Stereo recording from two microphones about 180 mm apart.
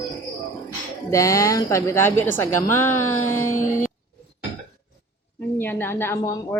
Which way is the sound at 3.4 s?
45° left (ahead or behind).